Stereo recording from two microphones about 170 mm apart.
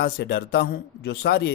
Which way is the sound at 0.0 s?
75° left (ahead or behind).